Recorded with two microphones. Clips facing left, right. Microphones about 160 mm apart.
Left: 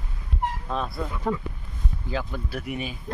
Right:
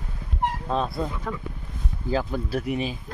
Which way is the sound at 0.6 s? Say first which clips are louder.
Right 4 dB; 20° right (ahead or behind).